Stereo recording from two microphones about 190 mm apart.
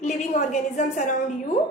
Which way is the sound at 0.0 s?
35° left (ahead or behind).